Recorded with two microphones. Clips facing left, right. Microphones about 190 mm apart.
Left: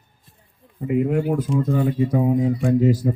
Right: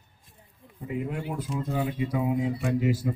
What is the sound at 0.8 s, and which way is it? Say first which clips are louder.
Speech: left 12 dB; 55° left (ahead or behind).